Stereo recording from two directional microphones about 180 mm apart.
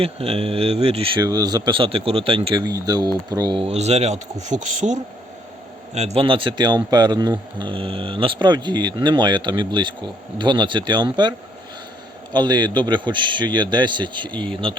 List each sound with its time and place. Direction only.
0.0 s speech: 35° right (ahead or behind)